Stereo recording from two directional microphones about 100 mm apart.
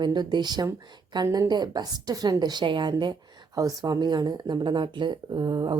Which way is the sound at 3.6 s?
35° right (ahead or behind).